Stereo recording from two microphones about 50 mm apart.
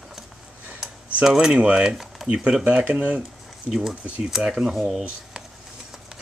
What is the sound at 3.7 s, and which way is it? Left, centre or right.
Speech, centre.